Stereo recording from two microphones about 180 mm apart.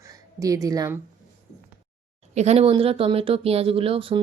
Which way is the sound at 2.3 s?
35° right (ahead or behind).